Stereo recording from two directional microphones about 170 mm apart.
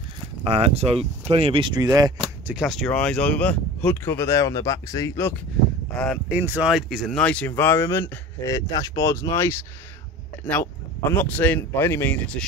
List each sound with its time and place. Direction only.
0.4 s speech: 35° right (ahead or behind)
2.1 s speech: 5° right (ahead or behind); by 5.3 s 15° left (ahead or behind)
6.2 s speech: 10° right (ahead or behind); by 12.4 s 10° left (ahead or behind)